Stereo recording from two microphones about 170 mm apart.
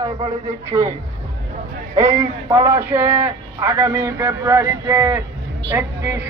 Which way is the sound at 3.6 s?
25° right (ahead or behind).